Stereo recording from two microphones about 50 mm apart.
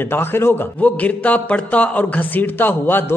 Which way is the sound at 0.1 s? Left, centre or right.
Left.